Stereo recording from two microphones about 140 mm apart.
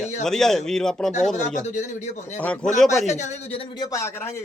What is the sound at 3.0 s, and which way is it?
Speech, 55° left (ahead or behind).